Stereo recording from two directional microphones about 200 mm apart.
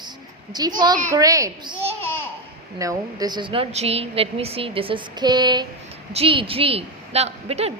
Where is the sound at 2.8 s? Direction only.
15° right (ahead or behind).